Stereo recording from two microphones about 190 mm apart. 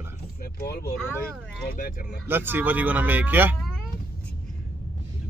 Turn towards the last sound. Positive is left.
turn(degrees=-10)  # may be behind; listen again after turning